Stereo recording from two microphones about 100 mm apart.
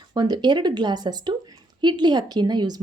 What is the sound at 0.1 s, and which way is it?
A woman's voice, 45° right (ahead or behind).